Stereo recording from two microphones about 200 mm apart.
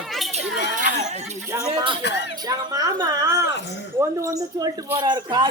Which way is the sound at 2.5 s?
20° right (ahead or behind).